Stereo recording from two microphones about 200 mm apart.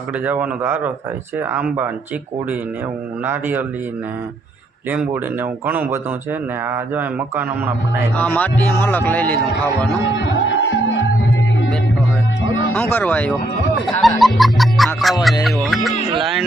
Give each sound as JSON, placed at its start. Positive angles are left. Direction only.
{"t": 0.3, "sound": "a man's voice", "side_deg": -10}
{"t": 3.2, "sound": "a man's voice", "side_deg": -10}
{"t": 4.9, "sound": "a man's voice", "side_deg": -10}
{"t": 8.1, "sound": "speech", "side_deg": 10}
{"t": 10.2, "sound": "music", "side_deg": 65}
{"t": 12.7, "sound": "speech", "side_deg": 10}
{"t": 13.8, "sound": "music", "side_deg": 0}